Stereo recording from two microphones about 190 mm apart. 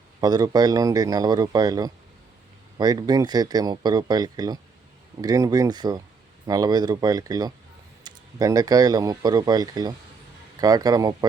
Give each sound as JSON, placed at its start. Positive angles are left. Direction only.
{"t": 0.2, "sound": "speech", "side_deg": -20}